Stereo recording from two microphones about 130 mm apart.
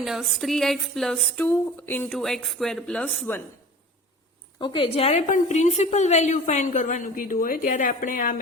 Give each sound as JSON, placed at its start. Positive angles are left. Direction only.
{"t": 0.0, "sound": "speech", "side_deg": -5}
{"t": 1.4, "sound": "speech", "side_deg": 15}
{"t": 2.1, "sound": "speech", "side_deg": 0}
{"t": 4.6, "sound": "a woman's voice", "side_deg": 40}
{"t": 5.3, "sound": "a woman's voice", "side_deg": 65}